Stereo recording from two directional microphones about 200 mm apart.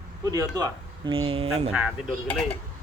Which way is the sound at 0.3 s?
20° right (ahead or behind).